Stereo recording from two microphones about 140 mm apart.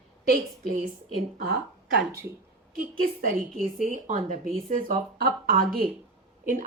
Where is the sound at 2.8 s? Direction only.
90° right; by 4.5 s 65° right (ahead or behind).